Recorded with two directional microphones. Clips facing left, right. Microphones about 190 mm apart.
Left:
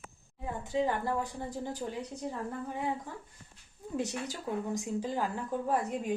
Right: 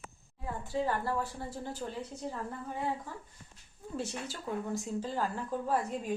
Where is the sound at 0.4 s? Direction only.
20° left (ahead or behind).